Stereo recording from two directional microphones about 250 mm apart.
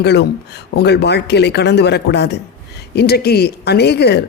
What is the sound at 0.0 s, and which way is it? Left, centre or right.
Speech, left.